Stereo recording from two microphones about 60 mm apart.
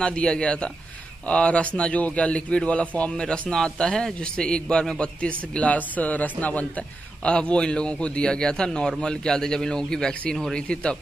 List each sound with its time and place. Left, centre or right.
0.0 s a man's voice: centre